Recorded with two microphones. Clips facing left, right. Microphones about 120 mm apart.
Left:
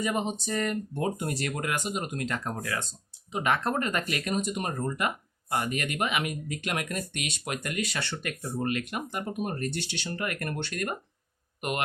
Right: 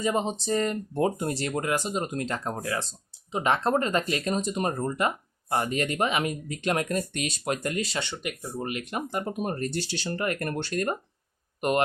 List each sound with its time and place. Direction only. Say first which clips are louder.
0.0 s speech: right 3 dB; 25° right (ahead or behind)
8.0 s speech: right 1 dB; 20° right (ahead or behind)
8.8 s speech: right 3 dB; 30° right (ahead or behind)